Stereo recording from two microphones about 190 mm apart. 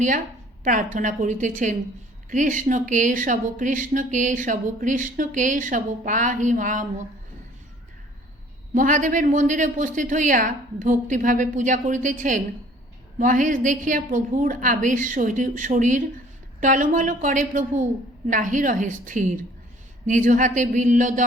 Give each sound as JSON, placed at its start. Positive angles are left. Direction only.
{"t": 0.6, "sound": "speech", "side_deg": -45}
{"t": 8.7, "sound": "speech", "side_deg": -40}